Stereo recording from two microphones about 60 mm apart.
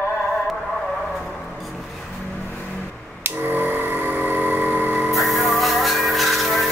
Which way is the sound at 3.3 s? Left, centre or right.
Right.